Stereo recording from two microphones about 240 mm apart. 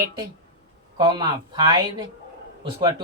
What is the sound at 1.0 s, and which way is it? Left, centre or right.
Speech, centre.